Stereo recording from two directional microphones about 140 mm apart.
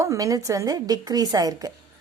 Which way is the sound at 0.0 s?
25° right (ahead or behind).